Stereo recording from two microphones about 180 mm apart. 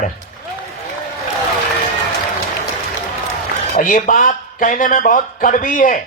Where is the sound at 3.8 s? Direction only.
45° left (ahead or behind).